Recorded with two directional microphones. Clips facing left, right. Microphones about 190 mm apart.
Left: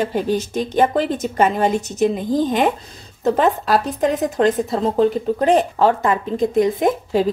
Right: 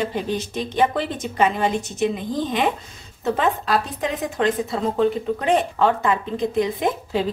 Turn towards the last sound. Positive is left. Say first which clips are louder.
# left 5 dB
turn(degrees=45)  # may be behind; listen again after turning